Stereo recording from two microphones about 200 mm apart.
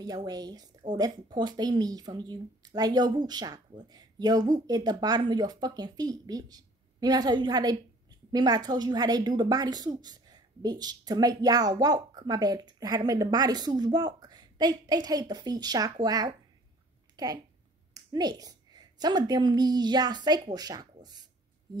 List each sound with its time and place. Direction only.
0.0 s a woman's voice: 20° right (ahead or behind)